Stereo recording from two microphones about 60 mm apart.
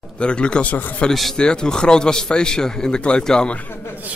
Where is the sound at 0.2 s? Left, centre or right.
Centre.